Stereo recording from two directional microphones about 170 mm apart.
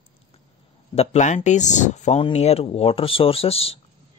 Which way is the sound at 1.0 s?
40° left (ahead or behind).